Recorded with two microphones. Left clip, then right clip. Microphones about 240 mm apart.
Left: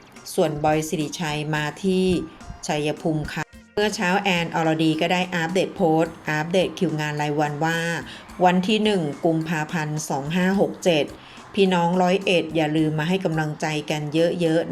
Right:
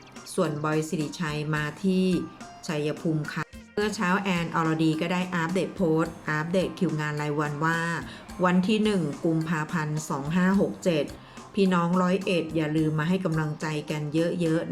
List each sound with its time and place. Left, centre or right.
0.3 s speech: centre